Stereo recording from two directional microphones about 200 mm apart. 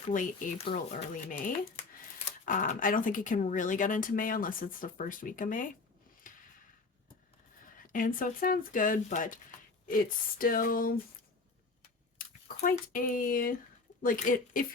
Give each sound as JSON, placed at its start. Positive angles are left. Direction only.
{"t": 0.1, "sound": "speech", "side_deg": 40}
{"t": 2.4, "sound": "speech", "side_deg": 40}
{"t": 6.3, "sound": "a sound", "side_deg": 40}
{"t": 7.8, "sound": "speech", "side_deg": 45}
{"t": 12.1, "sound": "speech", "side_deg": 45}